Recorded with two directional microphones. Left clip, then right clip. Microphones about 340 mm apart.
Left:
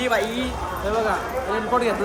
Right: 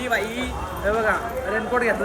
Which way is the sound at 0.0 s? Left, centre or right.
Centre.